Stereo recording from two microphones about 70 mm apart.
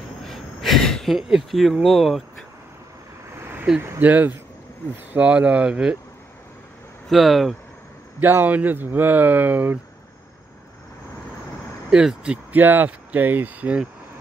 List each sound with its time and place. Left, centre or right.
0.2 s a sound: centre
1.3 s speech: centre
3.7 s speech: centre
4.0 s speech: right
7.1 s speech: centre
8.2 s speech: right
11.9 s speech: centre
12.5 s speech: right